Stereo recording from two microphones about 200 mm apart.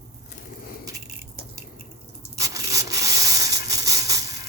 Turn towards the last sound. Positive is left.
turn(degrees=-15)  # may be behind; listen again after turning